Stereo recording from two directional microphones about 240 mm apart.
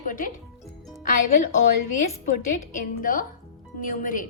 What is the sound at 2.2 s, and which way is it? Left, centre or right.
A woman's voice, left.